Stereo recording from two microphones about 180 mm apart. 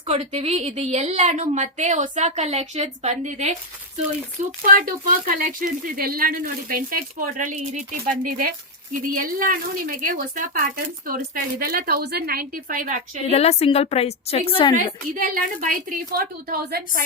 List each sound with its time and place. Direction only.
0.1 s a woman's voice: 35° right (ahead or behind)
4.6 s a woman's voice: 50° right (ahead or behind)
13.2 s a woman's voice: 35° left (ahead or behind)
15.1 s speech: 50° right (ahead or behind)